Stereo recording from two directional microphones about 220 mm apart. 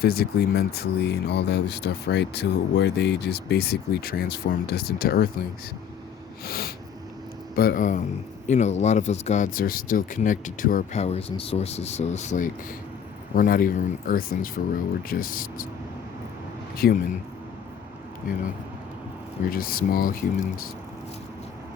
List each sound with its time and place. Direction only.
0.0 s speech: 45° left (ahead or behind)
6.4 s snort: 45° left (ahead or behind)
7.5 s speech: 45° left (ahead or behind)
16.7 s a man's voice: 45° left (ahead or behind)
19.5 s speech: 40° left (ahead or behind)